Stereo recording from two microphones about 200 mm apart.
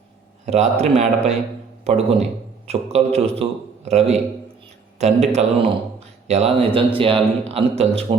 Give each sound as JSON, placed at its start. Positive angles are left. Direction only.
{"t": 0.4, "sound": "a man's voice", "side_deg": -35}